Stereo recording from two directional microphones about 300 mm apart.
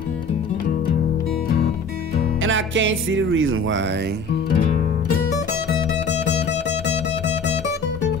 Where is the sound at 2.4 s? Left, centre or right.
Right.